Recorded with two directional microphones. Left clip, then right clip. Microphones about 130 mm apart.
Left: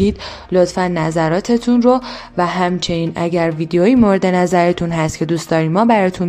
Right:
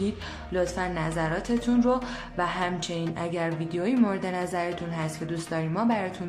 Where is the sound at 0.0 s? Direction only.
50° left (ahead or behind).